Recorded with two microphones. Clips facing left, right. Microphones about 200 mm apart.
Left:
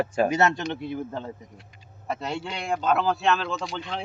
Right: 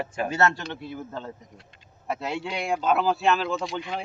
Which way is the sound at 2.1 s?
Centre (ahead or behind).